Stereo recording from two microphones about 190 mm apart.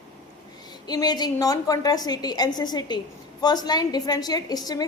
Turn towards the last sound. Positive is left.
turn(degrees=20)  # may be behind; listen again after turning